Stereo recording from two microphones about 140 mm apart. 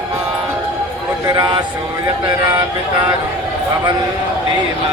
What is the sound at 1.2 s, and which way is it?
Speech, 30° right (ahead or behind).